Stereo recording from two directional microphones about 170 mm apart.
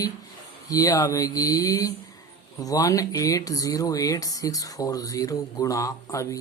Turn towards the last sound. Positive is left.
turn(degrees=20)  # may be behind; listen again after turning